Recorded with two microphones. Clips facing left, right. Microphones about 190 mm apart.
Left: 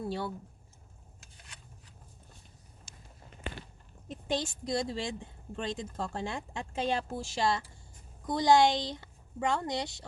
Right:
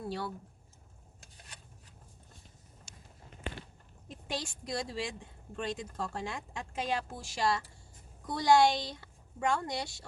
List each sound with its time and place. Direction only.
0.0 s speech: 25° left (ahead or behind)
4.1 s speech: 20° left (ahead or behind)